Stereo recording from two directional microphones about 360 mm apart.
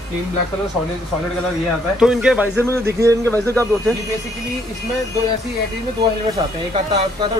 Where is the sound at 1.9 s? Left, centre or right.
Centre.